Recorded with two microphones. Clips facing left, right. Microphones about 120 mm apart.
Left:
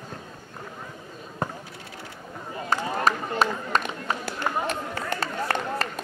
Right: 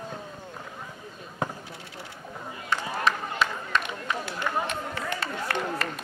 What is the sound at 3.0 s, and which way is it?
Run, 40° left (ahead or behind).